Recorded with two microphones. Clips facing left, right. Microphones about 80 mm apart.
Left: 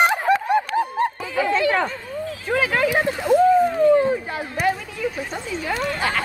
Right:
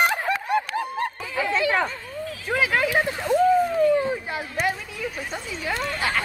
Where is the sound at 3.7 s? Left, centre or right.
Left.